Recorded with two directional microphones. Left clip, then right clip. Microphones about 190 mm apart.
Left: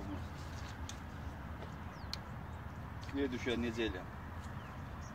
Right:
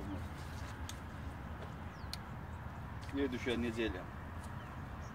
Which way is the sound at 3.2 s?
Centre (ahead or behind).